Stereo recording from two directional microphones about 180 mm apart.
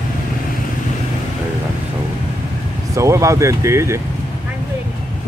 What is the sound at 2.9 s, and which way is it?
Speech, 15° right (ahead or behind).